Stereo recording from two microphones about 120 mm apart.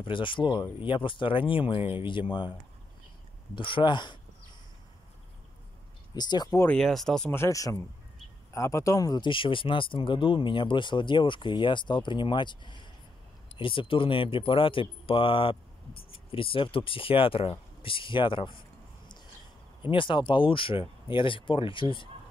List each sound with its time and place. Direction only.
0.0 s speech: 45° left (ahead or behind)
1.8 s speech: 15° right (ahead or behind)
3.5 s speech: 45° left (ahead or behind)
6.1 s speech: 35° left (ahead or behind)
6.8 s speech: 5° left (ahead or behind)
7.2 s speech: 20° left (ahead or behind); by 18.6 s 45° left (ahead or behind)
19.9 s speech: 45° left (ahead or behind)